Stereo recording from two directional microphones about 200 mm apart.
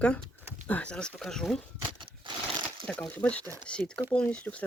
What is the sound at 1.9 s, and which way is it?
Crumpling, 25° right (ahead or behind).